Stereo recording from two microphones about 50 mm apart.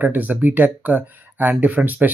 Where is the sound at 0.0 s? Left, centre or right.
Right.